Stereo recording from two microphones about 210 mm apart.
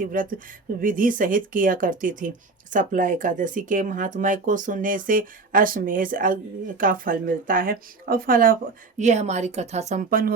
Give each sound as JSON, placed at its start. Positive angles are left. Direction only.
{"t": 0.0, "sound": "speech", "side_deg": -40}